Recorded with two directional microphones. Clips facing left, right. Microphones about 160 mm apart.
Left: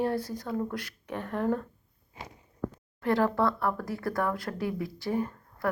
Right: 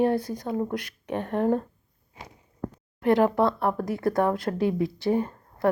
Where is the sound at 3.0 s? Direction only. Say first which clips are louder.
Right 5 dB; 20° right (ahead or behind).